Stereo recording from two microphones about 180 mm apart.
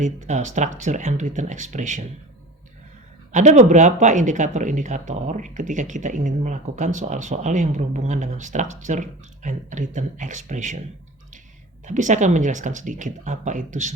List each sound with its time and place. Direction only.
0.0 s speech: 40° right (ahead or behind)
3.3 s speech: 40° right (ahead or behind)
11.9 s speech: 45° right (ahead or behind)